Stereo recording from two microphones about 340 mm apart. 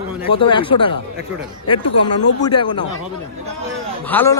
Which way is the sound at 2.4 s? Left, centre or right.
Centre.